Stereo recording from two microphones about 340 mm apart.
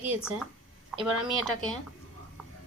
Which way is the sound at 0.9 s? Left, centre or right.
Centre.